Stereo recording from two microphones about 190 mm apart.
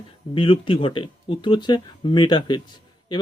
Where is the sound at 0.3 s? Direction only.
30° left (ahead or behind).